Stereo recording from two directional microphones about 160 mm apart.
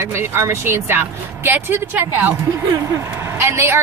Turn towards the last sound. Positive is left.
turn(degrees=-15)  # may be behind; listen again after turning